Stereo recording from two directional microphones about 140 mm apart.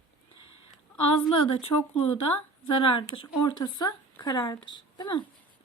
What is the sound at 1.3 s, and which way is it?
Speech, 40° left (ahead or behind).